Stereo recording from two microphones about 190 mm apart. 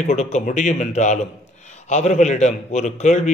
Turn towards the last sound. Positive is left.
turn(degrees=40)  # may be behind; listen again after turning